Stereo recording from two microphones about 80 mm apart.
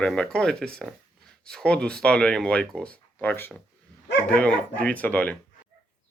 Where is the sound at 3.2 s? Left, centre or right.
Left.